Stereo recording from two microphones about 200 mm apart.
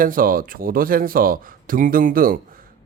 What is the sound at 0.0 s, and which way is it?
Speech, 45° right (ahead or behind).